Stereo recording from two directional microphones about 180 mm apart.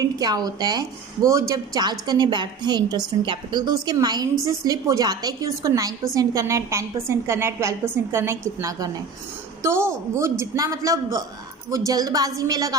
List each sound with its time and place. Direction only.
0.0 s a woman's voice: 20° right (ahead or behind)